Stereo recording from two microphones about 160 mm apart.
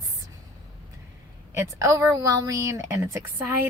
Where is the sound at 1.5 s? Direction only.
20° right (ahead or behind).